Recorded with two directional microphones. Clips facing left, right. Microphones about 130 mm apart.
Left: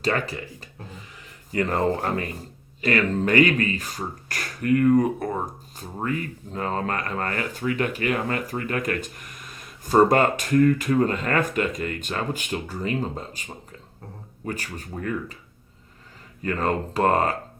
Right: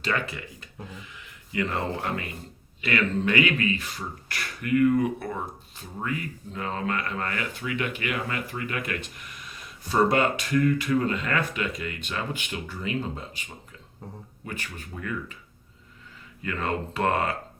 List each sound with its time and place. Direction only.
0.0 s speech: 40° left (ahead or behind)
16.4 s speech: 40° left (ahead or behind)